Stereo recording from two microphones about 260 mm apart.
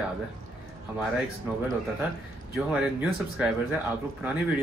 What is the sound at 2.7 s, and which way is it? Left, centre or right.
Speech, centre.